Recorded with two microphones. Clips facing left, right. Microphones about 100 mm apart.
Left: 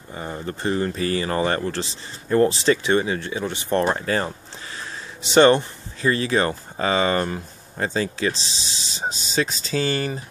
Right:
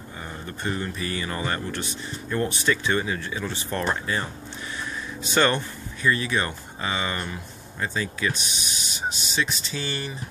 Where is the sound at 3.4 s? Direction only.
70° left (ahead or behind).